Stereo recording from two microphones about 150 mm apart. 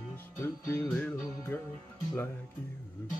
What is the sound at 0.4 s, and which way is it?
Music, 15° left (ahead or behind).